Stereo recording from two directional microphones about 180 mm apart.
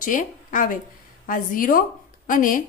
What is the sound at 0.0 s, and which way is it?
A woman's voice, 45° left (ahead or behind).